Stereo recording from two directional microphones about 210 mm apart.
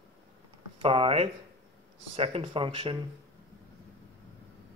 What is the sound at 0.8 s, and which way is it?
Speech, 25° right (ahead or behind).